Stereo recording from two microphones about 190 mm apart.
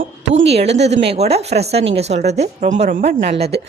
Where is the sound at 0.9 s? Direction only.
35° right (ahead or behind).